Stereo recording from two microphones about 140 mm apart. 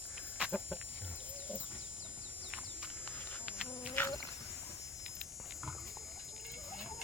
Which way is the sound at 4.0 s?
15° left (ahead or behind).